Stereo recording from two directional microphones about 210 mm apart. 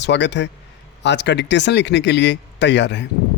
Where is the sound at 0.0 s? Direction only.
55° left (ahead or behind).